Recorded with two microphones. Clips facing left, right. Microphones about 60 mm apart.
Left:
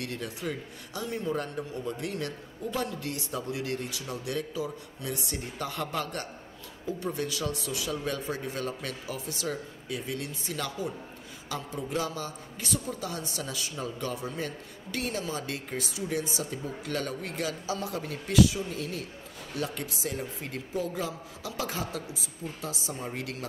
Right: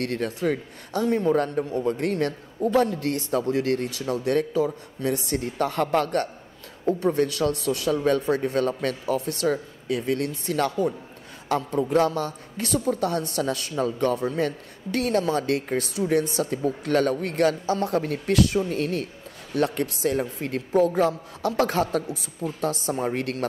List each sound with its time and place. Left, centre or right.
0.0 s a woman's voice: right